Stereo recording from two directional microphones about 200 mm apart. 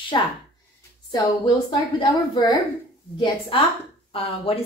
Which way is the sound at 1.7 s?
20° left (ahead or behind).